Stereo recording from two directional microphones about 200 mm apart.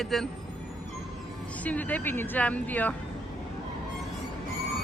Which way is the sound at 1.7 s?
10° left (ahead or behind).